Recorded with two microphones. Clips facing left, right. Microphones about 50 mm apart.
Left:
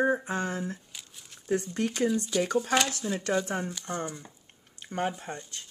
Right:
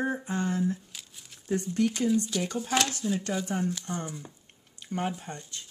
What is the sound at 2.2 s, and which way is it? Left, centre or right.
Speech, centre.